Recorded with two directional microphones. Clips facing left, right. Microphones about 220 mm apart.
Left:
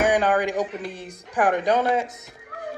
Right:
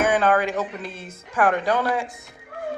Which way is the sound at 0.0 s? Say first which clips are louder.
Even; 15° left (ahead or behind).